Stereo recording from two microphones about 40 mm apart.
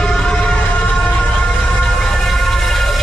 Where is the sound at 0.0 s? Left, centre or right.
Left.